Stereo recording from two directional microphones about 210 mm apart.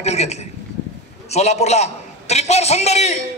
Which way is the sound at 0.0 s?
30° left (ahead or behind).